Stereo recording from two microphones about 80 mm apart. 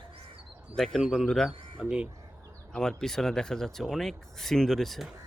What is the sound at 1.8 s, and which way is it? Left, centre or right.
Speech, centre.